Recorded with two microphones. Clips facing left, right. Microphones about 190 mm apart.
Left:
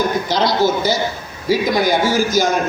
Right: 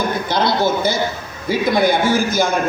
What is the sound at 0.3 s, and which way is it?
A man's voice, 55° right (ahead or behind).